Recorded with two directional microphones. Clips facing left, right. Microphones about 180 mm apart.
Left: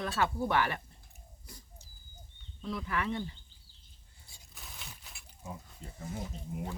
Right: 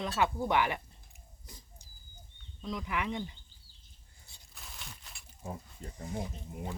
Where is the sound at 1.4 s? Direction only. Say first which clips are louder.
Left 1 dB; 20° right (ahead or behind).